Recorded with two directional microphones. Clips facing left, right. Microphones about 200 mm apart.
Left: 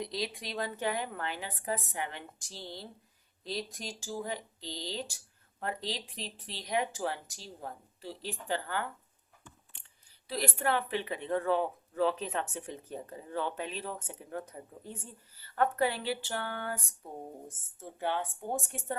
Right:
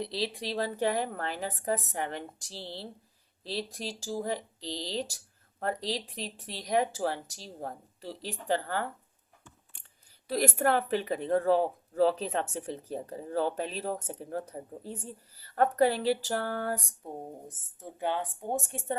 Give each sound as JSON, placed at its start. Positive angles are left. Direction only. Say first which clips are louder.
{"t": 0.0, "sound": "speech", "louder": "right 3 dB", "side_deg": -30}
{"t": 10.2, "sound": "speech", "louder": "right 5 dB", "side_deg": -45}
{"t": 17.7, "sound": "speech", "louder": "right 2 dB", "side_deg": -15}